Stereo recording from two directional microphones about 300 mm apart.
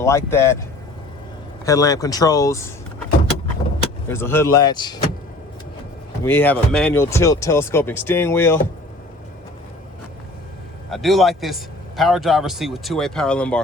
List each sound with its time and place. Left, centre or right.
0.0 s speech: centre
1.6 s speech: centre
4.1 s speech: centre
6.2 s speech: centre
10.8 s a man's voice: centre